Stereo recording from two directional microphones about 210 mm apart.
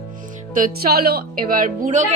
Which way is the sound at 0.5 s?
45° right (ahead or behind).